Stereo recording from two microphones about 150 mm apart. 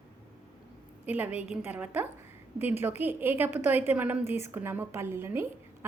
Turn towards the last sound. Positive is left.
turn(degrees=-15)  # may be behind; listen again after turning